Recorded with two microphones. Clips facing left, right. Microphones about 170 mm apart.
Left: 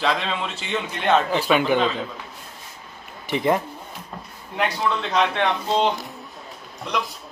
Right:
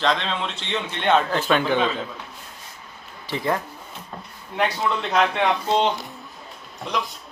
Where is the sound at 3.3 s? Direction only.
20° left (ahead or behind).